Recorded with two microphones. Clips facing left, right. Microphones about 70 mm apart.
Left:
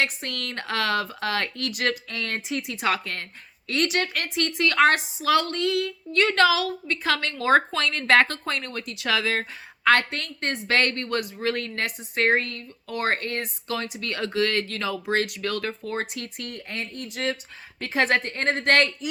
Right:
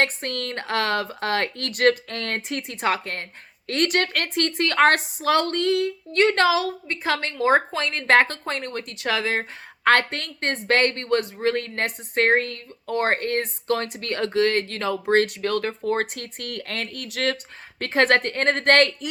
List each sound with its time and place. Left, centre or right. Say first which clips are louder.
0.0 s a woman's voice: right 3 dB; right
17.7 s speech: right 4 dB; right